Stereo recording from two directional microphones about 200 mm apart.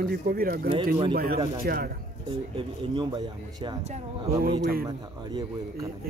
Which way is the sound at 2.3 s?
25° right (ahead or behind).